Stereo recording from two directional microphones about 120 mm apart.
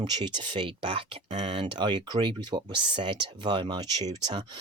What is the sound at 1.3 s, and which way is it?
Speech, 70° right (ahead or behind).